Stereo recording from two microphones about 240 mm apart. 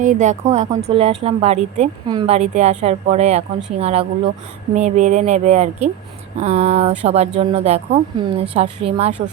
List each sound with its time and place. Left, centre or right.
0.0 s speech: right